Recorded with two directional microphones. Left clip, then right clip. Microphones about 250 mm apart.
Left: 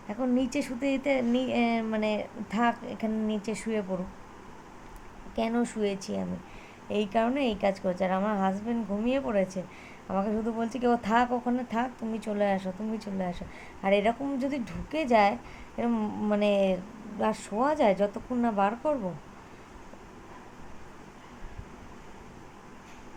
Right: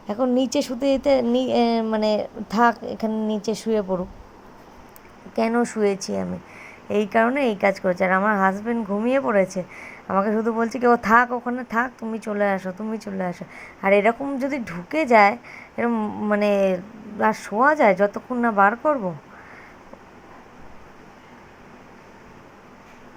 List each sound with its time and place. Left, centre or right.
0.1 s speech: right
5.3 s speech: centre